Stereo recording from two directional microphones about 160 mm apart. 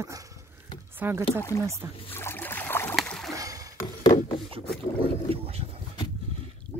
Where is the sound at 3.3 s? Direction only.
20° right (ahead or behind).